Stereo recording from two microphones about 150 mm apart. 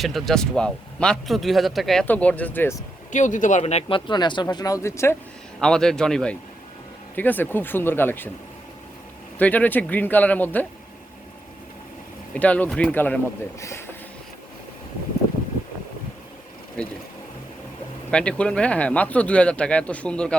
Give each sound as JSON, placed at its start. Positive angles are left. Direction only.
{"t": 0.0, "sound": "speech", "side_deg": 0}
{"t": 3.1, "sound": "speech", "side_deg": 55}
{"t": 5.5, "sound": "speech", "side_deg": 5}
{"t": 9.4, "sound": "speech", "side_deg": 10}
{"t": 12.3, "sound": "speech", "side_deg": 10}
{"t": 18.1, "sound": "speech", "side_deg": 5}